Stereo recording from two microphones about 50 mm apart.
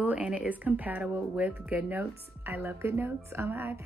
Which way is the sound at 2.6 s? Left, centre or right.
Right.